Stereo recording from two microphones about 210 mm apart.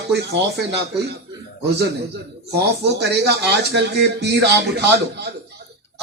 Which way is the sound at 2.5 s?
50° right (ahead or behind).